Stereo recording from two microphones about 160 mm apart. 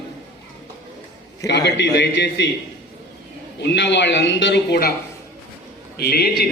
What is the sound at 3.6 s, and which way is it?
A man's voice, 90° left.